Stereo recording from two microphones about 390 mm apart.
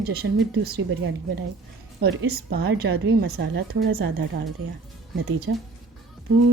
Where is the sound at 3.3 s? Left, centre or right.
Right.